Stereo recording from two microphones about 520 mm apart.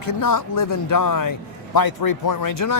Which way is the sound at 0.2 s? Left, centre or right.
Left.